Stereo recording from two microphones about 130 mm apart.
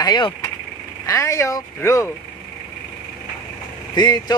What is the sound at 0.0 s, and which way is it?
Speech, 35° left (ahead or behind).